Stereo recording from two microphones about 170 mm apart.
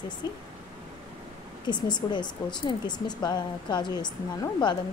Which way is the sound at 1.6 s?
25° left (ahead or behind).